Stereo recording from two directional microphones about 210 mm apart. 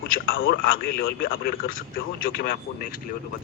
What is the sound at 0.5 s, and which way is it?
Speech, 45° left (ahead or behind).